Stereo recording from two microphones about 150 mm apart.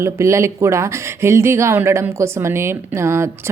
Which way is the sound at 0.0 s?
20° right (ahead or behind).